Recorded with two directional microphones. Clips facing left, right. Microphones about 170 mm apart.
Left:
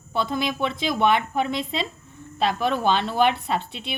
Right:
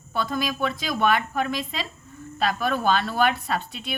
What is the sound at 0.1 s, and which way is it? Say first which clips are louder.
A woman's voice: left 2 dB; 25° left (ahead or behind).